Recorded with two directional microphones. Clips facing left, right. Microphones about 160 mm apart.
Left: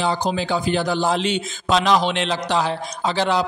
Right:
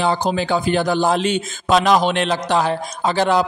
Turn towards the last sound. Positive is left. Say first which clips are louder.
# right 3 dB
turn(degrees=-50)  # may be behind; listen again after turning